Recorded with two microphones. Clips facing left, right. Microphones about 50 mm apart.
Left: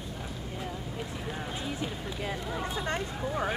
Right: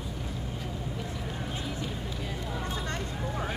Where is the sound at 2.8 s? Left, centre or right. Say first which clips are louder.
Left 2 dB; centre.